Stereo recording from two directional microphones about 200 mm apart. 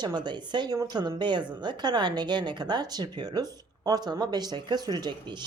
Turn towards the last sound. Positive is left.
turn(degrees=-20)  # may be behind; listen again after turning